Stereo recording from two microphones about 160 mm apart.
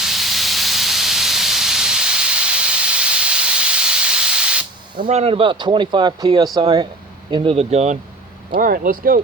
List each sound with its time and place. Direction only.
0.0 s steam: centre (ahead or behind)
5.0 s speech: 40° right (ahead or behind)
8.4 s speech: 60° right (ahead or behind)